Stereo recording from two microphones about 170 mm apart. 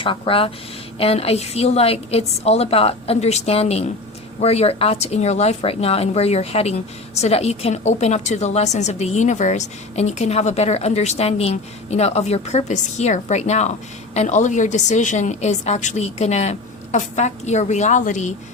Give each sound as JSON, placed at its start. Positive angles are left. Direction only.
{"t": 0.0, "sound": "speech", "side_deg": 30}